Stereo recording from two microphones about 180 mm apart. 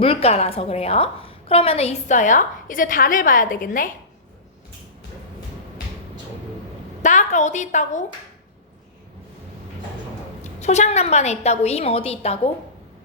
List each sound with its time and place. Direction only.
0.0 s a woman's voice: 30° left (ahead or behind); by 3.9 s 50° left (ahead or behind)
7.0 s a woman's voice: 40° left (ahead or behind)
10.4 s a woman's voice: 40° left (ahead or behind)